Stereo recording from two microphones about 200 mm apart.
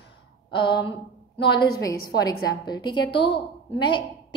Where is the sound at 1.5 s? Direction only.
20° left (ahead or behind).